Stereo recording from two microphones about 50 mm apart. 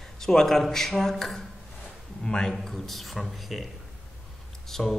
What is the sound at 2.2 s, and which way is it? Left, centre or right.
Speech, centre.